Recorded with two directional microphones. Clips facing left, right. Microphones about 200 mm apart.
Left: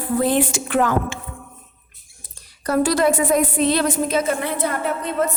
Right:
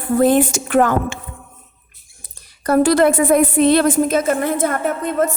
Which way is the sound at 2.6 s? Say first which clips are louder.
Right 4 dB; 55° right (ahead or behind).